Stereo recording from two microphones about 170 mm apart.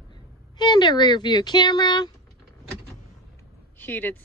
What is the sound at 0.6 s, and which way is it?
Speech, 25° left (ahead or behind).